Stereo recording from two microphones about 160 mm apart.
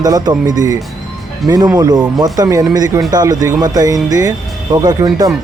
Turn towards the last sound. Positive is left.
turn(degrees=-25)  # may be behind; listen again after turning